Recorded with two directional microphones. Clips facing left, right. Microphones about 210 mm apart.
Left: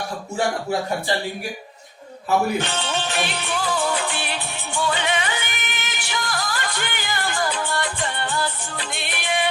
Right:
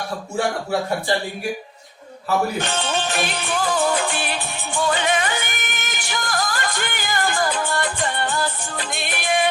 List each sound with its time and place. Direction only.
2.6 s music: 45° right (ahead or behind)